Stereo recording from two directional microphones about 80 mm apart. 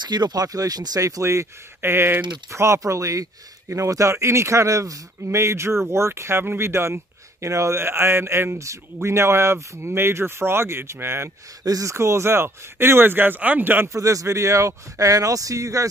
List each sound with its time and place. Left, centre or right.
0.0 s speech: right
11.6 s speech: right
13.9 s speech: right